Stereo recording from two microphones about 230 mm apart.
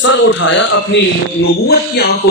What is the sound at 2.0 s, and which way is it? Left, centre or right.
Speech, left.